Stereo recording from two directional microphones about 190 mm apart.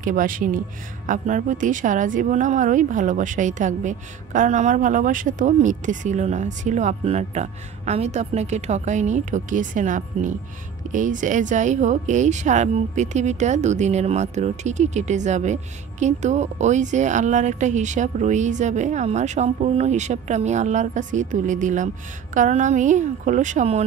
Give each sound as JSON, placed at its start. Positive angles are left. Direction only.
{"t": 0.0, "sound": "speech", "side_deg": -45}